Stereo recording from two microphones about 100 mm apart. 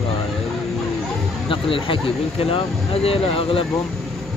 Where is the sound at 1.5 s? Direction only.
60° left (ahead or behind).